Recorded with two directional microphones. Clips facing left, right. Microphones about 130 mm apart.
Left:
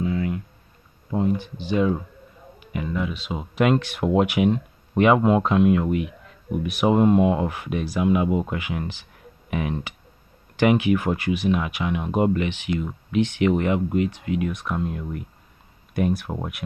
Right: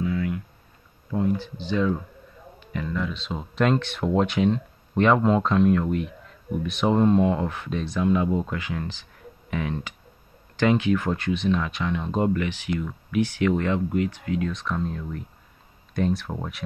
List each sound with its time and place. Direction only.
0.0 s a sound: 25° left (ahead or behind)
1.1 s speech: 20° left (ahead or behind)
14.6 s speech: 10° left (ahead or behind)